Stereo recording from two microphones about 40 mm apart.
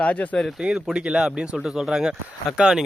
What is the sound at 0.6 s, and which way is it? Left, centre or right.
Speech, right.